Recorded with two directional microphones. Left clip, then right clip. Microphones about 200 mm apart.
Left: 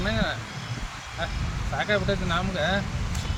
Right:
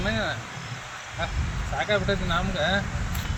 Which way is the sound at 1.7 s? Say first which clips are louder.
Even; centre (ahead or behind).